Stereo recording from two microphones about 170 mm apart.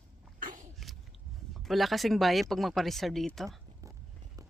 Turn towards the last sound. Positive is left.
turn(degrees=0)  # may be behind; listen again after turning